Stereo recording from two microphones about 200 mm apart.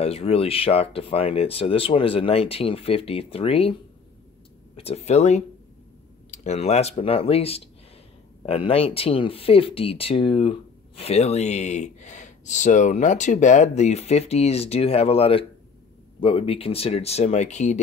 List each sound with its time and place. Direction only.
0.0 s speech: 30° left (ahead or behind)
4.7 s speech: 30° left (ahead or behind)